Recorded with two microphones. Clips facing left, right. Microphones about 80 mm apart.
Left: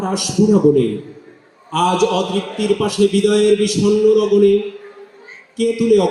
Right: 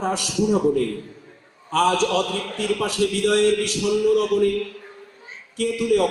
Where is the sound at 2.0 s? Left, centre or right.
Right.